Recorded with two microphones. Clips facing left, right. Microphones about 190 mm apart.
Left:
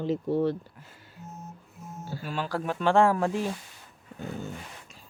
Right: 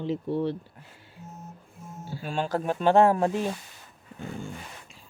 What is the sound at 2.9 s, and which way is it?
Speech, 20° right (ahead or behind).